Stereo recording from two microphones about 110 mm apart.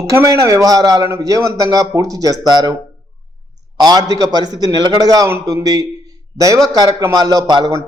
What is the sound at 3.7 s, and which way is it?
A man's voice, 35° right (ahead or behind).